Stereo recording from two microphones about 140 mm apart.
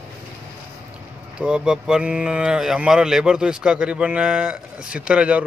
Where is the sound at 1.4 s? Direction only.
5° right (ahead or behind).